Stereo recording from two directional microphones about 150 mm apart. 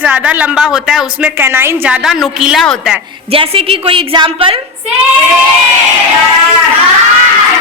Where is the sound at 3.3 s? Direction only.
40° right (ahead or behind).